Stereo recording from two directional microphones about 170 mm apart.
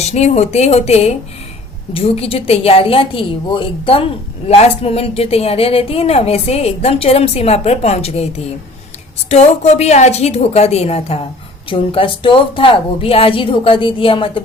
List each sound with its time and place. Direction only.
0.0 s a woman's voice: 40° left (ahead or behind)